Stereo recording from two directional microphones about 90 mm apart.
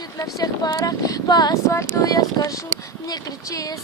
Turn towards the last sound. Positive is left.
turn(degrees=40)  # may be behind; listen again after turning